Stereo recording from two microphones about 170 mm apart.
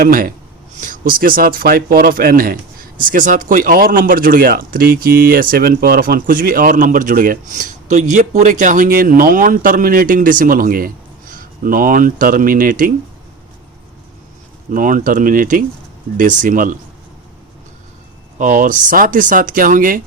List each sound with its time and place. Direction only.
0.0 s speech: 55° right (ahead or behind)
14.7 s speech: 50° right (ahead or behind)
18.3 s speech: 50° right (ahead or behind)